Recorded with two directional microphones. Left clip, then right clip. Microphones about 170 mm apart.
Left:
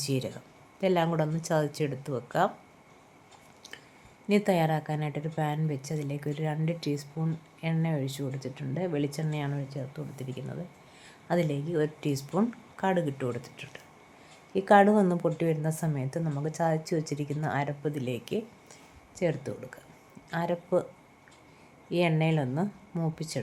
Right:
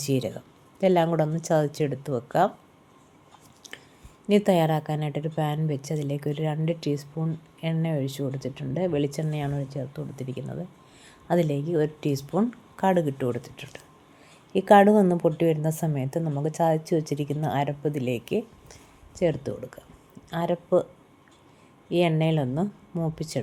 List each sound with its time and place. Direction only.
0.0 s a woman's voice: 20° right (ahead or behind)
3.6 s a sound: 20° right (ahead or behind)
4.3 s a woman's voice: 20° right (ahead or behind)
21.8 s a woman's voice: 15° right (ahead or behind)